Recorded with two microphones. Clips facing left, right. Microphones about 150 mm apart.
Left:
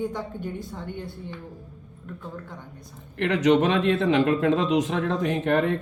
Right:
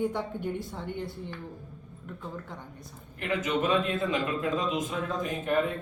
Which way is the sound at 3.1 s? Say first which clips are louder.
Left 9 dB; 80° left.